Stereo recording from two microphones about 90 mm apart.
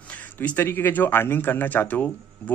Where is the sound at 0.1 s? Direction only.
20° left (ahead or behind).